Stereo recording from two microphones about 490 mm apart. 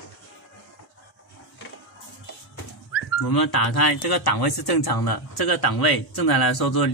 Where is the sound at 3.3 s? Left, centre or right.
Left.